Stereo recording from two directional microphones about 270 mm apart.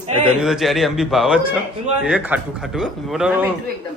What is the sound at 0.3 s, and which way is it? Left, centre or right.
Speech, centre.